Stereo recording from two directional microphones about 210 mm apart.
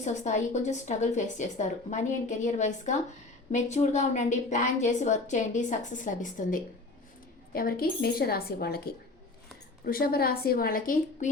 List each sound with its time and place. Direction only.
0.0 s a woman's voice: 35° left (ahead or behind)